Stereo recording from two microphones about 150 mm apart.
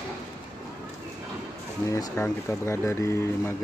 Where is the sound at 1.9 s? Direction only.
20° left (ahead or behind).